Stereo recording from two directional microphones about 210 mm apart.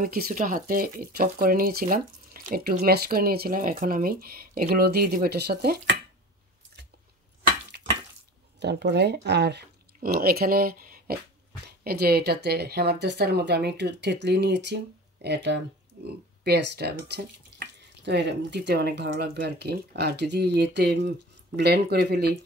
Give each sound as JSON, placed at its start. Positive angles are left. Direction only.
{"t": 0.0, "sound": "speech", "side_deg": -40}
{"t": 7.7, "sound": "water", "side_deg": -50}
{"t": 8.5, "sound": "speech", "side_deg": -55}